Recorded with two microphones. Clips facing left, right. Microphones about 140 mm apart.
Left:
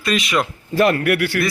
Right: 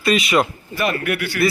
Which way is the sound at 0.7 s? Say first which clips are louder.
Left 6 dB; 85° left.